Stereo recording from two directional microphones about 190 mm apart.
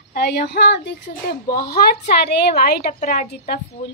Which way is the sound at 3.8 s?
30° left (ahead or behind).